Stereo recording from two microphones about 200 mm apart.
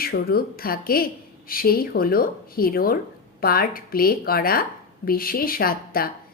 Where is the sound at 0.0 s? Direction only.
50° left (ahead or behind).